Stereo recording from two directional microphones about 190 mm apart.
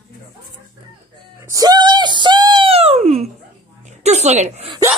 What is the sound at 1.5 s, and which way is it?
A woman's voice, 20° right (ahead or behind).